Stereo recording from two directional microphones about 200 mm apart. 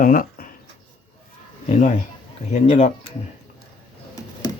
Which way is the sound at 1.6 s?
35° left (ahead or behind).